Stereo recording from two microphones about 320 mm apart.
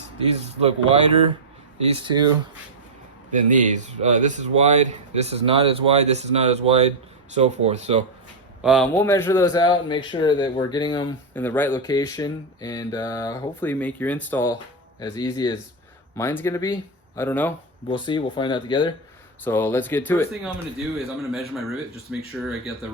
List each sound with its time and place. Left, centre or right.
0.3 s speech: centre
3.3 s speech: right
8.6 s a man's voice: centre